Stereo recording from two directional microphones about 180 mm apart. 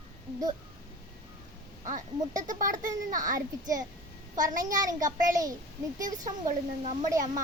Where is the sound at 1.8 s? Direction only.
45° right (ahead or behind).